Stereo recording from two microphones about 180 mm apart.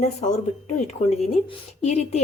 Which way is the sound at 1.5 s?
35° left (ahead or behind).